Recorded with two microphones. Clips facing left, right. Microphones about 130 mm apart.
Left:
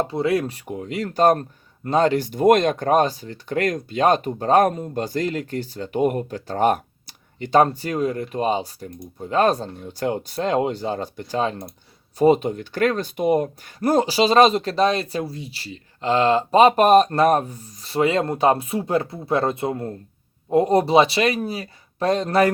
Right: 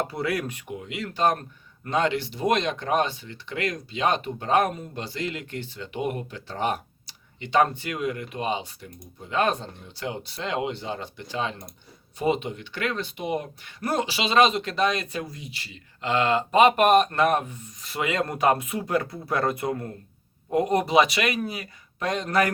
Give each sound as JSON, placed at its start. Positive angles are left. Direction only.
{"t": 0.1, "sound": "speech", "side_deg": 25}